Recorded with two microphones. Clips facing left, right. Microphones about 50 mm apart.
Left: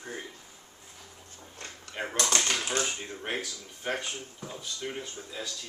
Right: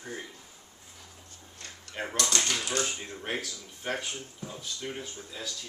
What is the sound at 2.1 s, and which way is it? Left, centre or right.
Speech, left.